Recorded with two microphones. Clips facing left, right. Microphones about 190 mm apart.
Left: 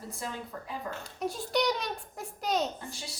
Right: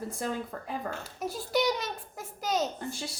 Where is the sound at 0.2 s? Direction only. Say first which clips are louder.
Right 4 dB; 55° right (ahead or behind).